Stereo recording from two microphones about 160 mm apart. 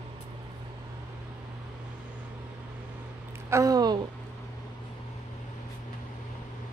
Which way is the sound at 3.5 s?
20° right (ahead or behind).